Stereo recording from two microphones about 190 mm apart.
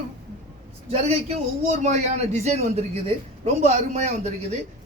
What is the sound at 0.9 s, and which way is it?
A man's voice, 35° right (ahead or behind).